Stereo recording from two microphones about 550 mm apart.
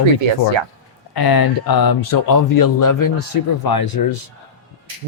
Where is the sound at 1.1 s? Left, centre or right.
Left.